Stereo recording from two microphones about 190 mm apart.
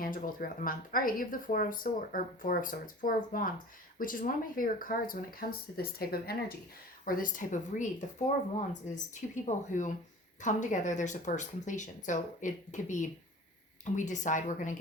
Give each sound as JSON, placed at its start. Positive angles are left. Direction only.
{"t": 0.0, "sound": "speech", "side_deg": 45}
{"t": 8.9, "sound": "speech", "side_deg": -5}
{"t": 9.3, "sound": "speech", "side_deg": 40}